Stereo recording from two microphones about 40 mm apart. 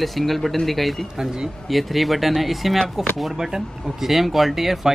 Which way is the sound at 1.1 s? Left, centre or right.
Centre.